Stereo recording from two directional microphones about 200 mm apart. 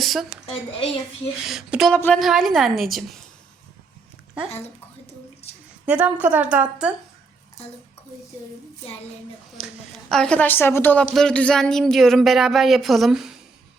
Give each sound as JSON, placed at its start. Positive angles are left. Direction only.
{"t": 0.0, "sound": "a woman's voice", "side_deg": 0}
{"t": 0.5, "sound": "a woman's voice", "side_deg": 25}
{"t": 1.5, "sound": "a woman's voice", "side_deg": 0}
{"t": 5.4, "sound": "a sound", "side_deg": 30}
{"t": 5.8, "sound": "a woman's voice", "side_deg": -10}
{"t": 10.1, "sound": "a woman's voice", "side_deg": 5}